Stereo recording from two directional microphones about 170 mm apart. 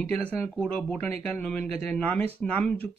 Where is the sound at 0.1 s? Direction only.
5° left (ahead or behind).